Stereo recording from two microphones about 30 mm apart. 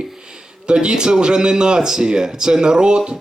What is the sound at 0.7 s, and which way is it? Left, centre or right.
Speech, right.